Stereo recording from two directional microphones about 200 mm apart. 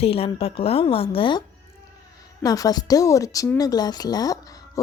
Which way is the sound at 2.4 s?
20° left (ahead or behind).